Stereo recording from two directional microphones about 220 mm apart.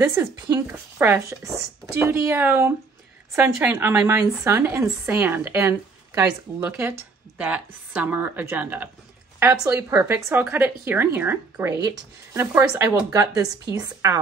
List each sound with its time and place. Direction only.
0.0 s a woman's voice: 10° right (ahead or behind)